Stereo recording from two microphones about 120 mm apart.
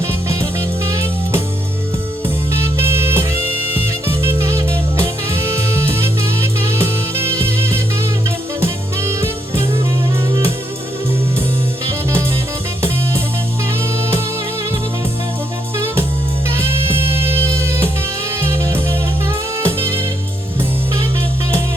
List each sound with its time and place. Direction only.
0.9 s music: 25° right (ahead or behind)
2.5 s music: 20° right (ahead or behind)
16.6 s music: 20° right (ahead or behind)